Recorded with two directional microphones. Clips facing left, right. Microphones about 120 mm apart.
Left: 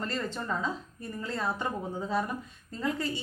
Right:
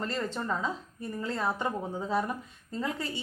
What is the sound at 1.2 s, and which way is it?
A woman's voice, 20° right (ahead or behind).